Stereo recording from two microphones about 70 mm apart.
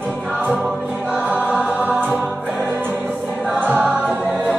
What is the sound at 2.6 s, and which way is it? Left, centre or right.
Music, right.